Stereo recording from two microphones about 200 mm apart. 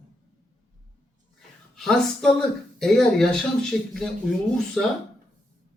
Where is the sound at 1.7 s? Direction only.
Centre (ahead or behind).